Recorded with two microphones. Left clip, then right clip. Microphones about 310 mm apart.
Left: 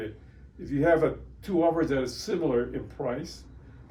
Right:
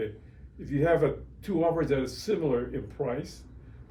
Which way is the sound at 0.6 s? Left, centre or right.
Centre.